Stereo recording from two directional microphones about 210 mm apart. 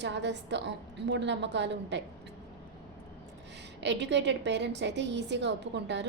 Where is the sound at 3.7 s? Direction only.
55° right (ahead or behind).